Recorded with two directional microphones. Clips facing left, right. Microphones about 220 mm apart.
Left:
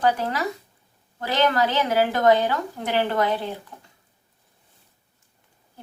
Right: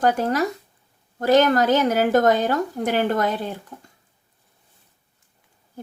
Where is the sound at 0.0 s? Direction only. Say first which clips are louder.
Right 3 dB; 45° right (ahead or behind).